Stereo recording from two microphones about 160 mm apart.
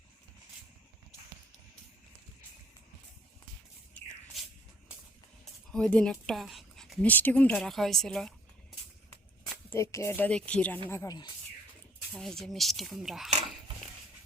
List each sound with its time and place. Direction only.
5.7 s speech: 5° left (ahead or behind)
9.6 s speech: 15° left (ahead or behind)
12.1 s speech: centre (ahead or behind)